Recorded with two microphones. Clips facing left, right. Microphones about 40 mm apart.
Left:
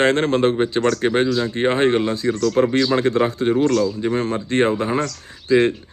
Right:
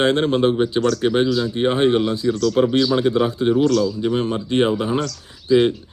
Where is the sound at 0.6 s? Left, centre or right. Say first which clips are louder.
Even; left.